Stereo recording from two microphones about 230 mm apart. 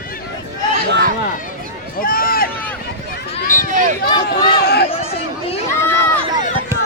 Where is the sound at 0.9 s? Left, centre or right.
Right.